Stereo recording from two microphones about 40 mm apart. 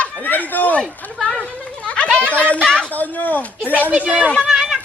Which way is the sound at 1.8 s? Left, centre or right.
Left.